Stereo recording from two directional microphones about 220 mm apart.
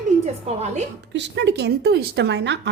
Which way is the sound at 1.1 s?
55° right (ahead or behind).